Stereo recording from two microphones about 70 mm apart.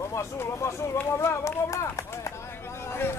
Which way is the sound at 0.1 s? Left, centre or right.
Left.